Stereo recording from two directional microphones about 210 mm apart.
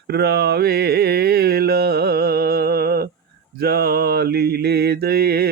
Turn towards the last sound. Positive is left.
turn(degrees=-45)  # may be behind; listen again after turning